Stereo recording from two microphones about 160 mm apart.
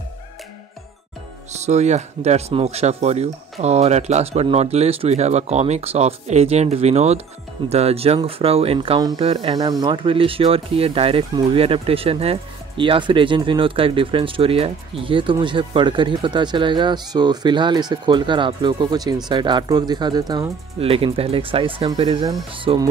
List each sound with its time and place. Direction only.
1.6 s speech: 45° right (ahead or behind)
9.6 s speech: 25° right (ahead or behind)
20.8 s speech: 35° right (ahead or behind)